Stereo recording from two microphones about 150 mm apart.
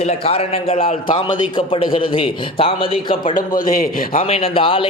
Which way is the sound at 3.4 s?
70° left (ahead or behind).